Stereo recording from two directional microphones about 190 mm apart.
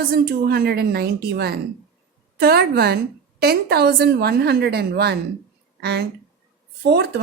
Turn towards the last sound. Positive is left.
turn(degrees=-60)  # may be behind; listen again after turning